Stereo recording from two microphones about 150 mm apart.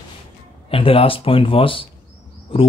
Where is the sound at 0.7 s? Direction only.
40° left (ahead or behind).